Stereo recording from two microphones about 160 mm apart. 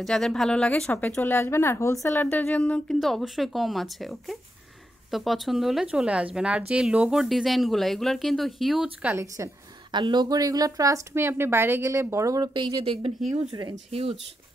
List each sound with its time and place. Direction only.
0.0 s a woman's voice: 5° left (ahead or behind); by 14.1 s 40° right (ahead or behind)